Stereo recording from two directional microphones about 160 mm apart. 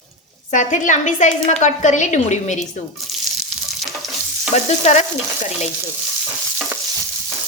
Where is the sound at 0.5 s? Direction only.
50° left (ahead or behind).